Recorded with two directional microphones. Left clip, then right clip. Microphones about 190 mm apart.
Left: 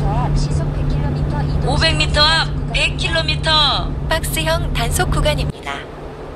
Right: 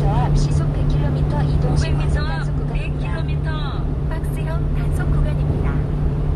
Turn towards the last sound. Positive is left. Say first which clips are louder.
# left 9 dB
turn(degrees=55)  # may be behind; listen again after turning